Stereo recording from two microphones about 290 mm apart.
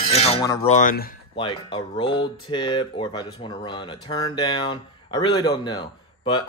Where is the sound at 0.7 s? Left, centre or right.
Left.